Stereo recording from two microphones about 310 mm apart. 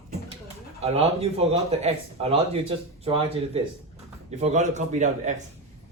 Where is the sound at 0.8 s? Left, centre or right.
Centre.